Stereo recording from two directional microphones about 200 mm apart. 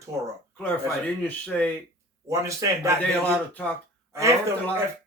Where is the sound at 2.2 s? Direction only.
15° right (ahead or behind).